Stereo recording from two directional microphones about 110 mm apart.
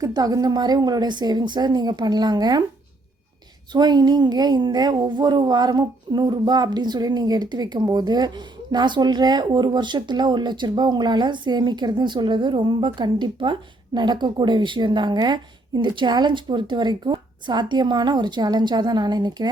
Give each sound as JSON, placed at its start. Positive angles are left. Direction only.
{"t": 0.0, "sound": "a woman's voice", "side_deg": -35}
{"t": 3.7, "sound": "a woman's voice", "side_deg": -40}